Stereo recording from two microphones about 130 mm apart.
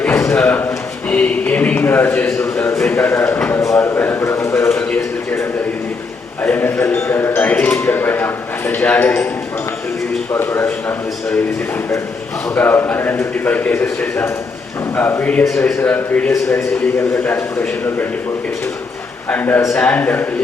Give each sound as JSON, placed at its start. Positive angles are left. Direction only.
{"t": 0.0, "sound": "a sound", "side_deg": 20}
{"t": 1.1, "sound": "a man's voice", "side_deg": 10}
{"t": 2.7, "sound": "a sound", "side_deg": 10}
{"t": 6.4, "sound": "speech", "side_deg": 15}
{"t": 10.3, "sound": "speech", "side_deg": 20}
{"t": 12.5, "sound": "a man's voice", "side_deg": 15}
{"t": 19.3, "sound": "speech", "side_deg": 15}